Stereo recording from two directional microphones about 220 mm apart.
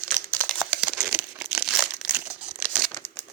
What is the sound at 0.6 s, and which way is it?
Crumpling, 5° right (ahead or behind).